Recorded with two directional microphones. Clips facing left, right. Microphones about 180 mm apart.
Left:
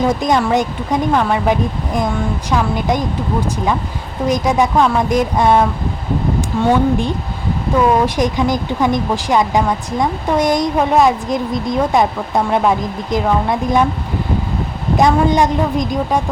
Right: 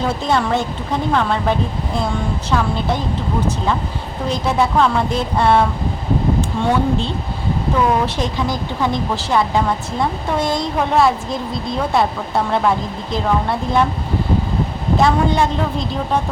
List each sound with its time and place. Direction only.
0.0 s speech: 15° left (ahead or behind)
4.3 s speech: 15° left (ahead or behind)
14.9 s speech: 15° left (ahead or behind)